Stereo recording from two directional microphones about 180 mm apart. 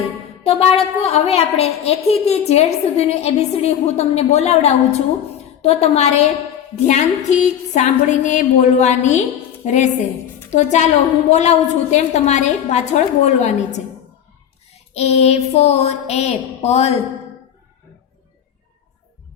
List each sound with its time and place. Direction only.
0.4 s a woman's voice: 35° left (ahead or behind)
14.9 s a woman's voice: 35° left (ahead or behind)